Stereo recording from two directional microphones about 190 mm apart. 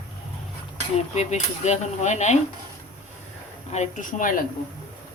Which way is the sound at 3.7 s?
40° left (ahead or behind).